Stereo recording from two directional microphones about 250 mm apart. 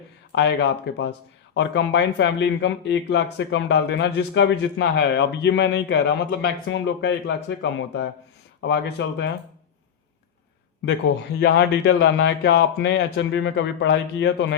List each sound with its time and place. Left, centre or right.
0.3 s speech: left
11.3 s speech: left